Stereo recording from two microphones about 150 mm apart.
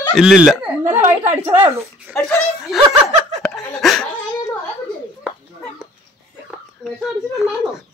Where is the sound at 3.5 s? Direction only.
5° left (ahead or behind).